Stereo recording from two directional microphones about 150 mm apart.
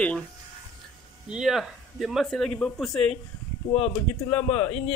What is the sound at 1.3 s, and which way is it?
Speech, 5° right (ahead or behind).